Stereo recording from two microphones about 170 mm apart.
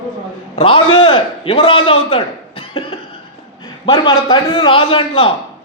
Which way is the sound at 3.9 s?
30° left (ahead or behind).